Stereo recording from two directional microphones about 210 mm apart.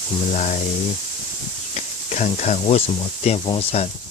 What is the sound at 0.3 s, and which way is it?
Speech, 35° left (ahead or behind).